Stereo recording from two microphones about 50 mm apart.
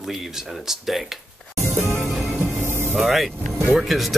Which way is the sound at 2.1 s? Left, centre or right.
Centre.